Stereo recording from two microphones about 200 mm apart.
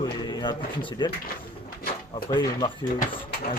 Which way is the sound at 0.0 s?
20° left (ahead or behind).